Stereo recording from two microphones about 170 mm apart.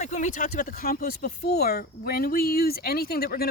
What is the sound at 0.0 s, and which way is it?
Speech, 45° left (ahead or behind).